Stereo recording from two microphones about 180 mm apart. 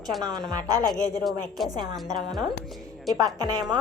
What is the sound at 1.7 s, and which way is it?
Speech, 20° right (ahead or behind).